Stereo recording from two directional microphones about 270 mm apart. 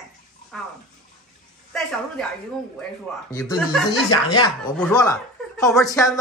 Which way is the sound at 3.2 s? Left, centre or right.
Centre.